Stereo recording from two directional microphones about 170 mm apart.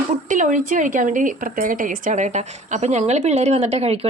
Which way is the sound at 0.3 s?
50° right (ahead or behind).